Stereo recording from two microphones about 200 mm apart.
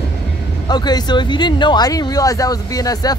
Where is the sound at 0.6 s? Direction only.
20° left (ahead or behind).